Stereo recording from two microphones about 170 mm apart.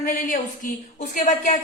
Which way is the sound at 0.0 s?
50° left (ahead or behind).